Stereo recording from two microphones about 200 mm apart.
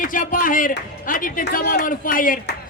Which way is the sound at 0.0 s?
45° left (ahead or behind).